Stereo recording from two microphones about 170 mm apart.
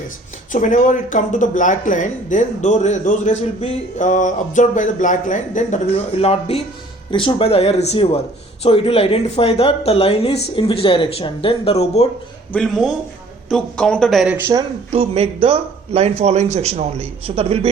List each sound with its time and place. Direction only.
0.5 s speech: 50° left (ahead or behind)
12.5 s speech: centre (ahead or behind)
14.3 s speech: 15° right (ahead or behind)
14.9 s speech: 35° right (ahead or behind)